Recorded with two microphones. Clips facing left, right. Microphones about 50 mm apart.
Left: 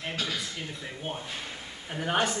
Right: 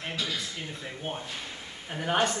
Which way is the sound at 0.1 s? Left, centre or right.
Left.